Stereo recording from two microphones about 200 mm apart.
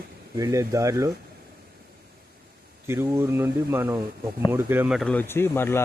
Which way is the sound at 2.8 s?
10° right (ahead or behind).